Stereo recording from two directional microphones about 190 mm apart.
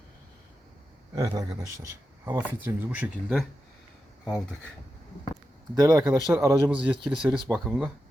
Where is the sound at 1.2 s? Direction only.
15° right (ahead or behind).